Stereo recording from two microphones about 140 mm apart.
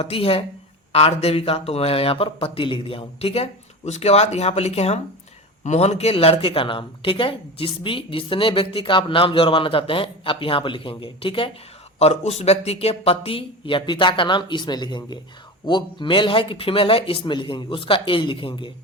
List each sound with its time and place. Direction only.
0.0 s speech: 45° left (ahead or behind)
11.9 s speech: 50° left (ahead or behind)